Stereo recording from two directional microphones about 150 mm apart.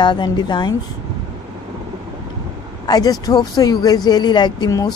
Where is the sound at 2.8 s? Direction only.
25° left (ahead or behind).